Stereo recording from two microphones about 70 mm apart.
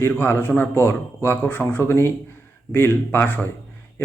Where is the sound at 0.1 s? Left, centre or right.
Left.